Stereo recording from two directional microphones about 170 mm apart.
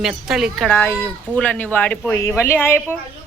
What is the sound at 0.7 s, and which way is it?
Speech, 15° left (ahead or behind).